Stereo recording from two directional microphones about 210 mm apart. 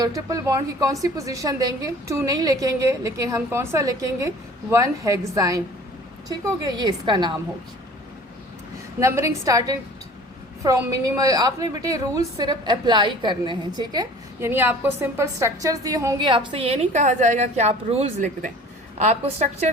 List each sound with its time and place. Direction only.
0.0 s a woman's voice: 15° right (ahead or behind)
9.0 s a woman's voice: 15° right (ahead or behind); by 19.7 s 30° right (ahead or behind)